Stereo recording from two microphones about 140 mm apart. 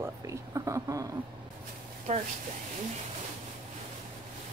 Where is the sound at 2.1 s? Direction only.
60° right (ahead or behind).